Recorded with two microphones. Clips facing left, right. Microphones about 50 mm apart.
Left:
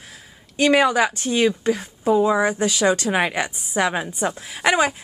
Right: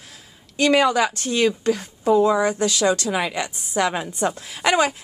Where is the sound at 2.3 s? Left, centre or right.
Left.